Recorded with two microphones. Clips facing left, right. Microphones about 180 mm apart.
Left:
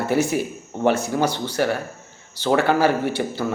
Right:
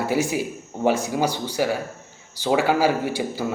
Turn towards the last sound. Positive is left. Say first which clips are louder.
# left 2 dB
turn(degrees=-10)  # may be behind; listen again after turning